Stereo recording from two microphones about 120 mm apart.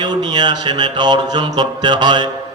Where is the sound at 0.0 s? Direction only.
35° right (ahead or behind).